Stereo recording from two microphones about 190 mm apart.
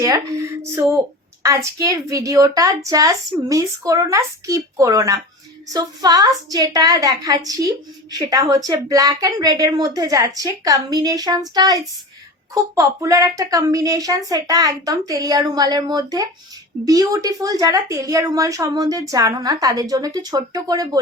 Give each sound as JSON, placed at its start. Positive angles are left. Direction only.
{"t": 0.0, "sound": "a woman's voice", "side_deg": -20}